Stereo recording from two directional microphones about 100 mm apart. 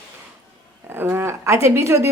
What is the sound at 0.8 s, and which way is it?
A woman's voice, 25° right (ahead or behind).